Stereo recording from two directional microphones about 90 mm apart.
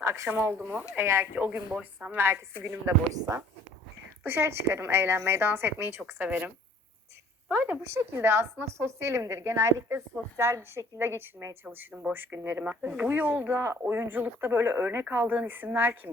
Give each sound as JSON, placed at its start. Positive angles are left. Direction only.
{"t": 0.0, "sound": "speech", "side_deg": -35}
{"t": 1.4, "sound": "speech", "side_deg": -20}
{"t": 4.2, "sound": "speech", "side_deg": -25}
{"t": 6.0, "sound": "speech", "side_deg": -15}
{"t": 7.5, "sound": "speech", "side_deg": -20}